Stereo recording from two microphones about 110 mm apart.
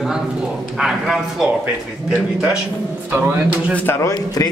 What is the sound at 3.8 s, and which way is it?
Speech, 30° left (ahead or behind).